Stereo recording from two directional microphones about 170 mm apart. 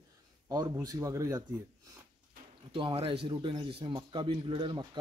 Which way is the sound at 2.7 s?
30° right (ahead or behind).